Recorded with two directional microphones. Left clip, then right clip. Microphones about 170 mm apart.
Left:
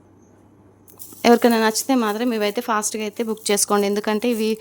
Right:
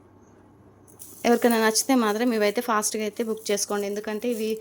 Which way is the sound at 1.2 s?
30° left (ahead or behind).